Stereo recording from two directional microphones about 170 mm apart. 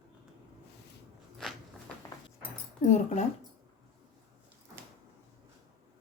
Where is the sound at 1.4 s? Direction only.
Centre (ahead or behind).